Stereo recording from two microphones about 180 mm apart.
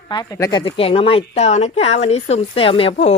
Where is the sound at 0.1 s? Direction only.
20° left (ahead or behind).